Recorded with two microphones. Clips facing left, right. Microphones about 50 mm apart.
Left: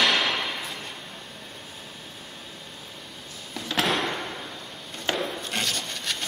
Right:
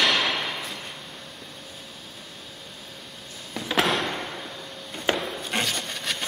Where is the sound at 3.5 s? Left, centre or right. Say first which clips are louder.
Right 2 dB; centre.